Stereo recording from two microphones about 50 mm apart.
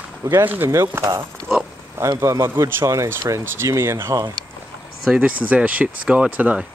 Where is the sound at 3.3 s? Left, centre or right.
Right.